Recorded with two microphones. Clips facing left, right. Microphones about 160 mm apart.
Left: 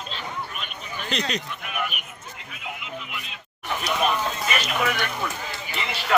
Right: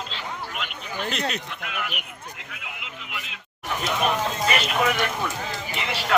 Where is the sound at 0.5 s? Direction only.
90° right.